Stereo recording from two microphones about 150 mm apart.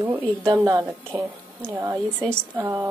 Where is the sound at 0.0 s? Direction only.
20° right (ahead or behind).